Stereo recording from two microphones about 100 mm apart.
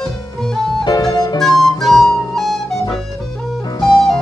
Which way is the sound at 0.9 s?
40° left (ahead or behind).